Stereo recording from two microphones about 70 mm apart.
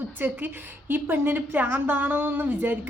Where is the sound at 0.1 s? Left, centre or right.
Right.